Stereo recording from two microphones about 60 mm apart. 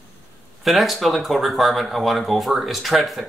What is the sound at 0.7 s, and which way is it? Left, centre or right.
Speech, centre.